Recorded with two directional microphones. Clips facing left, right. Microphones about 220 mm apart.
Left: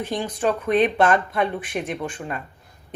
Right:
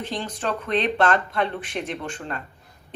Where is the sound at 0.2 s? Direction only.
10° left (ahead or behind).